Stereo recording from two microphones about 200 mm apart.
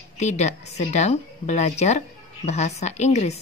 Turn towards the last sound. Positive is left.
turn(degrees=35)  # may be behind; listen again after turning